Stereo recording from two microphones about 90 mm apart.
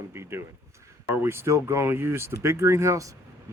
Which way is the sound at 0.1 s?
30° right (ahead or behind).